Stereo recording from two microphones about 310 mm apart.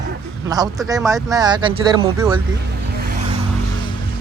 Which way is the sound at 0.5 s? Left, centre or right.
Centre.